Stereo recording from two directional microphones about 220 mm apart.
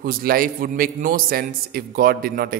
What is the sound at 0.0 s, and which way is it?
A man's voice, 40° right (ahead or behind).